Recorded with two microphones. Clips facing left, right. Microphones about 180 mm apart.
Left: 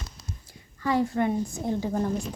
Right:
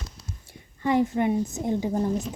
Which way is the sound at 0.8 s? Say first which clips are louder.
Right 2 dB; 20° right (ahead or behind).